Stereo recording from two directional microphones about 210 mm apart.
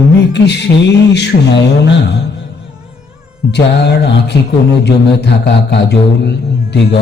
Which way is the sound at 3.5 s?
55° left (ahead or behind).